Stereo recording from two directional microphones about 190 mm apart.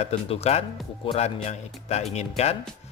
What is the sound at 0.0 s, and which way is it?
Speech, 35° left (ahead or behind).